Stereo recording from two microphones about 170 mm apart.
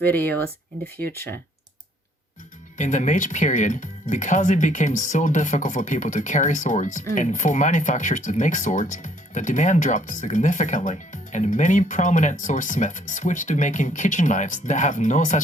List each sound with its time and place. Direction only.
0.0 s speech: 10° left (ahead or behind)
2.7 s speech: 45° left (ahead or behind)